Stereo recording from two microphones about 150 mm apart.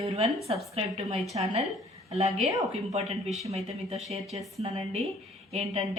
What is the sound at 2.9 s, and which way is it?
Speech, 45° right (ahead or behind).